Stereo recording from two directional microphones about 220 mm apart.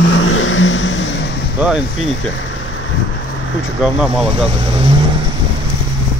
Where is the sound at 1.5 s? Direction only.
5° right (ahead or behind).